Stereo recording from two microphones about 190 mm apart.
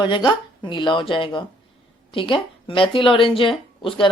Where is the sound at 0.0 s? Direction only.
25° left (ahead or behind).